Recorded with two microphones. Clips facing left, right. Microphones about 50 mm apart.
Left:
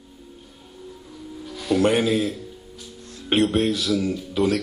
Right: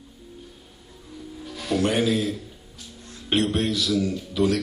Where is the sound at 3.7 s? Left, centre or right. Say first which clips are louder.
Left 1 dB; left.